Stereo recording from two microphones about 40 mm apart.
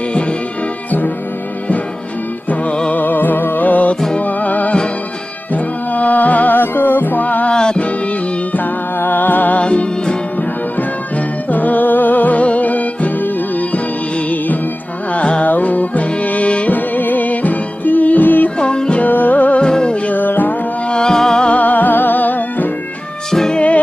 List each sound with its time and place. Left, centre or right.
2.9 s music: left
7.5 s music: centre
8.5 s music: left
9.6 s music: left
10.8 s music: left
15.1 s carnatic music: left
15.4 s music: left
16.7 s music: left
18.6 s music: left
18.9 s music: left
19.6 s music: left
20.1 s music: left
20.9 s music: centre
21.5 s music: left